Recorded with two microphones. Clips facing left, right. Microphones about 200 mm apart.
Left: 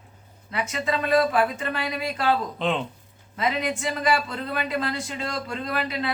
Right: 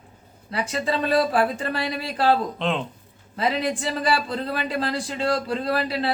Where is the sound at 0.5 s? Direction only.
30° right (ahead or behind).